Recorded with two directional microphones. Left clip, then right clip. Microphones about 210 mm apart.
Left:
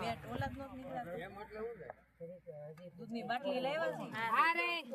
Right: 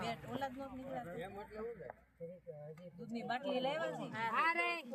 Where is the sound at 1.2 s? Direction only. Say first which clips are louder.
Even; centre (ahead or behind).